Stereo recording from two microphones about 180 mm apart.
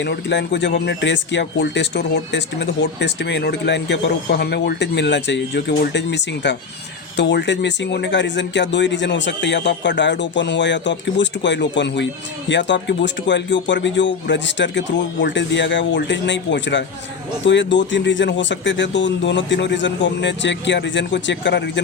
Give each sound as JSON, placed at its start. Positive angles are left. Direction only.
{"t": 0.0, "sound": "speech", "side_deg": 70}